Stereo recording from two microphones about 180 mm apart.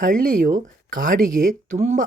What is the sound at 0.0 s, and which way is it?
Speech, 50° right (ahead or behind).